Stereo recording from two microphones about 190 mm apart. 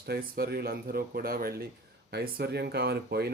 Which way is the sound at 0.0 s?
55° right (ahead or behind).